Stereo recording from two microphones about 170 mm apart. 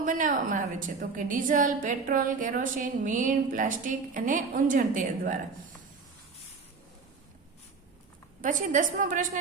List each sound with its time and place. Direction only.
0.0 s a woman's voice: 50° right (ahead or behind)
8.4 s a woman's voice: 50° right (ahead or behind)